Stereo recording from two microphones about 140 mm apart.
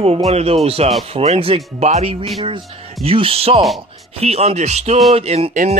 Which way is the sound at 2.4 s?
40° right (ahead or behind).